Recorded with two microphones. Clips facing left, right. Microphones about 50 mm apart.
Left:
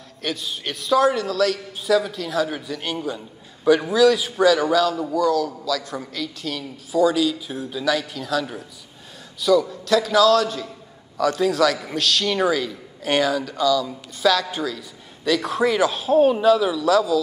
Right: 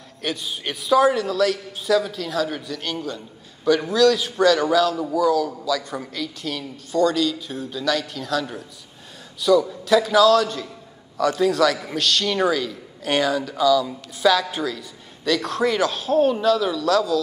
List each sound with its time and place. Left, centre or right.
0.2 s a man's voice: centre